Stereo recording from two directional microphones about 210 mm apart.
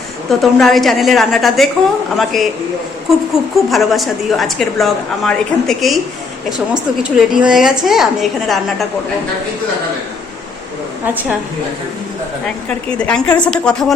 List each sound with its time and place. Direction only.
0.3 s a woman's voice: centre (ahead or behind)
7.0 s a woman's voice: 5° right (ahead or behind)
11.0 s a woman's voice: 10° right (ahead or behind)
12.6 s a woman's voice: 5° left (ahead or behind)